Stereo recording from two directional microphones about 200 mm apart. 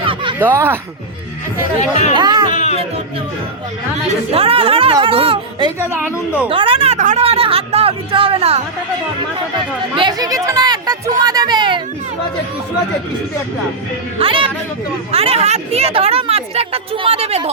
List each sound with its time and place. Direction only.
0.0 s a sound: 25° right (ahead or behind)
0.3 s speech: 10° right (ahead or behind)
1.8 s speech: 35° left (ahead or behind)
2.1 s a woman's voice: 20° right (ahead or behind)
2.5 s music: 35° left (ahead or behind)
4.3 s a woman's voice: 30° right (ahead or behind)
5.8 s speech: 10° right (ahead or behind)
6.5 s speech: 25° right (ahead or behind)
9.9 s a woman's voice: 20° right (ahead or behind)
14.2 s a woman's voice: 25° right (ahead or behind)